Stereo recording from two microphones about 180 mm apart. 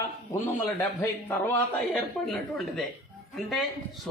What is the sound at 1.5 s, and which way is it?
Speech, centre (ahead or behind).